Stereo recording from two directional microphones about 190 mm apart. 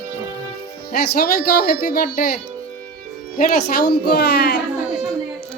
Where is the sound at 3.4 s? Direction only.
55° left (ahead or behind).